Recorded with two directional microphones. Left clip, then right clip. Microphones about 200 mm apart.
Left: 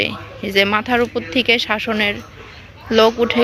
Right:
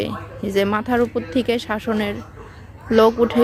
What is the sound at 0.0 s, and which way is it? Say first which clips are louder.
A woman's voice: left 4 dB; 20° right (ahead or behind).